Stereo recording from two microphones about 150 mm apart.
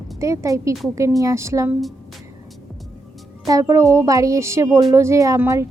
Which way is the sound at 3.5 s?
20° right (ahead or behind).